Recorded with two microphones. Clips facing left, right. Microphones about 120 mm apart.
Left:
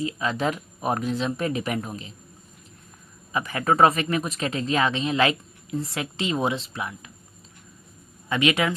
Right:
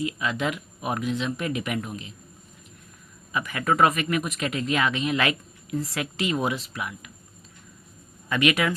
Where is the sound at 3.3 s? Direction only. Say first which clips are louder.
Left 2 dB; 30° left (ahead or behind).